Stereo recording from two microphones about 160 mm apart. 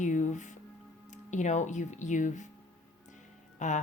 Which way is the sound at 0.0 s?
50° left (ahead or behind).